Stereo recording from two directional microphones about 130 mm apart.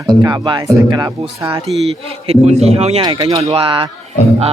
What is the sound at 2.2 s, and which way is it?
Speech, 55° right (ahead or behind).